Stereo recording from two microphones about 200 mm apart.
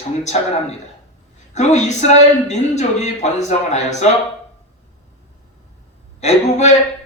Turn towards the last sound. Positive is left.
turn(degrees=35)  # may be behind; listen again after turning